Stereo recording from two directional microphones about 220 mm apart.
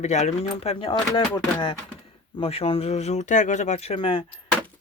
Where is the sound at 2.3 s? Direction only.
25° left (ahead or behind).